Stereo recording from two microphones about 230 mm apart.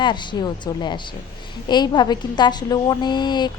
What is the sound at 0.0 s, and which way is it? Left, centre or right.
A woman's voice, centre.